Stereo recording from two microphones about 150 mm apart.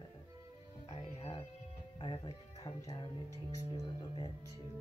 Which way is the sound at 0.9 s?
45° left (ahead or behind).